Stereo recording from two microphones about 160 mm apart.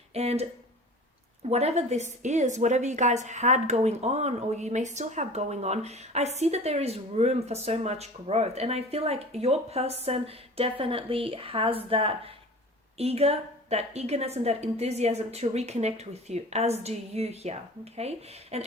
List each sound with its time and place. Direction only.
0.1 s speech: 40° right (ahead or behind)
1.5 s a woman's voice: 40° right (ahead or behind)